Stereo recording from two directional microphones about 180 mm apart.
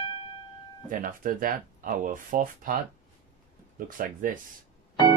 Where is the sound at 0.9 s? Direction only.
50° right (ahead or behind).